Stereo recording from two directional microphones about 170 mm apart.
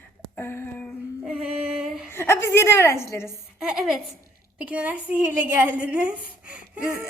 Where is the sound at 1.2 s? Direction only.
5° right (ahead or behind).